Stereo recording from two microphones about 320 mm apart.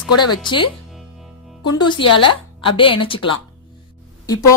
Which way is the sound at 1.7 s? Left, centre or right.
Centre.